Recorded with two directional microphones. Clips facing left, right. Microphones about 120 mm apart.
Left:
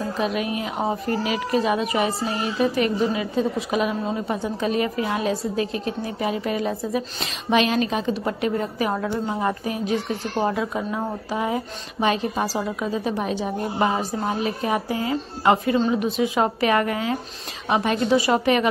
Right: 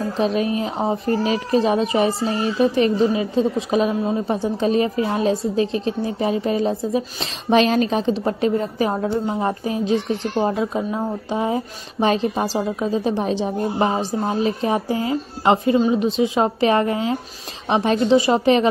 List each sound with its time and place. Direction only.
0.2 s a child's voice: 30° right (ahead or behind)